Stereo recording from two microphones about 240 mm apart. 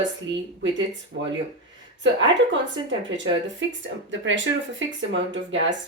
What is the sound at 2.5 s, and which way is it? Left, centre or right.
Speech, right.